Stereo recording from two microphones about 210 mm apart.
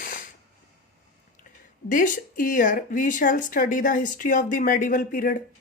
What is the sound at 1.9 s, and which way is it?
Speech, 40° left (ahead or behind).